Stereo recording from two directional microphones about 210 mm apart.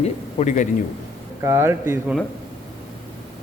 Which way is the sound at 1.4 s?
15° right (ahead or behind).